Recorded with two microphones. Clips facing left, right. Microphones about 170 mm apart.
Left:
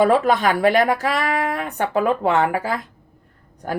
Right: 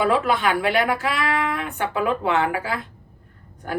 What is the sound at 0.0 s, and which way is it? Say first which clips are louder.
A woman's voice: left 4 dB; 40° left (ahead or behind).